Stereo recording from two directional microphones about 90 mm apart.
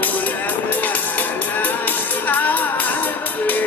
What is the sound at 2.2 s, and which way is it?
Music, 20° left (ahead or behind).